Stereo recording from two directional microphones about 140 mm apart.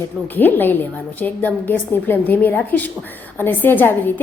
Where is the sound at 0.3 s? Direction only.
15° left (ahead or behind).